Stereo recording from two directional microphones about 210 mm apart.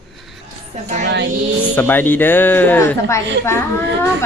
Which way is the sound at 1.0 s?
55° right (ahead or behind).